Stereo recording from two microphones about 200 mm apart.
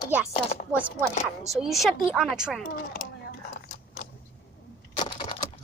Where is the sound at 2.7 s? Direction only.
45° left (ahead or behind).